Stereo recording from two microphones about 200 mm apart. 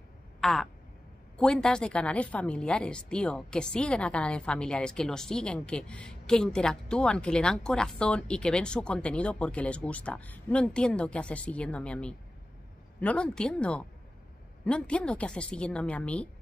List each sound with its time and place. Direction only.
0.4 s a woman's voice: centre (ahead or behind)